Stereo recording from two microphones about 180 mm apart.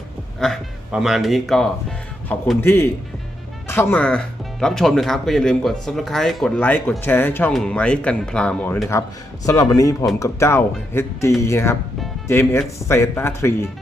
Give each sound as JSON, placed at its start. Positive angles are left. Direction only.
{"t": 0.3, "sound": "a sound", "side_deg": 0}
{"t": 2.3, "sound": "speech", "side_deg": 10}
{"t": 9.5, "sound": "speech", "side_deg": 20}